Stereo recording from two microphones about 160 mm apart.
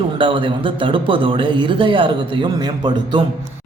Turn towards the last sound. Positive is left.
turn(degrees=-25)  # may be behind; listen again after turning